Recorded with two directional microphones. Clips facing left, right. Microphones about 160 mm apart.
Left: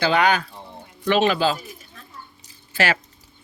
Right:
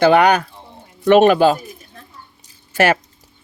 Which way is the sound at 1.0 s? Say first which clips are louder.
Right 8 dB; 50° right (ahead or behind).